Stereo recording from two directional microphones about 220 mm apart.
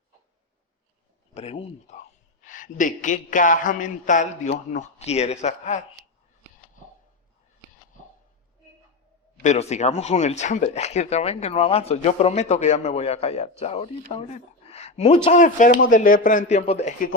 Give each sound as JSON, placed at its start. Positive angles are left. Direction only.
{"t": 1.3, "sound": "a man's voice", "side_deg": 30}
{"t": 9.4, "sound": "a man's voice", "side_deg": 30}